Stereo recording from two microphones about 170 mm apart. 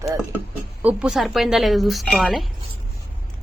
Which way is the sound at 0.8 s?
10° right (ahead or behind).